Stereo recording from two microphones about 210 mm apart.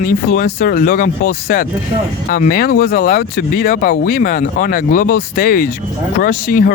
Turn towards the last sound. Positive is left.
turn(degrees=45)  # may be behind; listen again after turning